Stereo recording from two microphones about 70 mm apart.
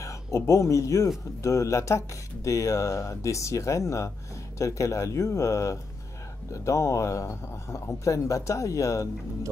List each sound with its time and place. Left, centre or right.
0.0 s speech: left